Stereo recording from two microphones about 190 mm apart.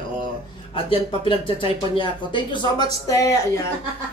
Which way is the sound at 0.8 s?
30° left (ahead or behind).